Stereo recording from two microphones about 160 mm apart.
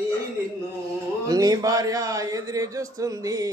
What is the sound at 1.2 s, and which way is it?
A man's voice, 25° right (ahead or behind).